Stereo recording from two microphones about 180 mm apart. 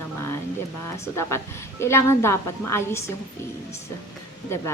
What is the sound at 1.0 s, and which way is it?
A woman's voice, 15° left (ahead or behind).